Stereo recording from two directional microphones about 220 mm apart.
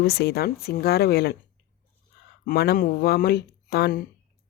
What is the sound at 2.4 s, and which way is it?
Speech, 45° left (ahead or behind).